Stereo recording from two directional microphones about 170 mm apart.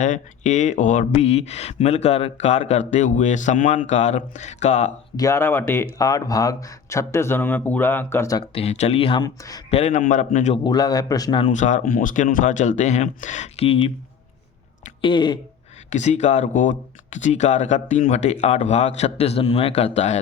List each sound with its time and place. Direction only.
0.0 s speech: 45° left (ahead or behind)
5.1 s speech: 20° left (ahead or behind)
8.5 s speech: 40° left (ahead or behind); by 9.6 s 20° left (ahead or behind)
9.6 s a man's voice: 35° left (ahead or behind)
10.6 s a man's voice: 25° left (ahead or behind)
11.5 s speech: 45° left (ahead or behind)
15.0 s a man's voice: 25° left (ahead or behind)
15.9 s speech: 40° left (ahead or behind)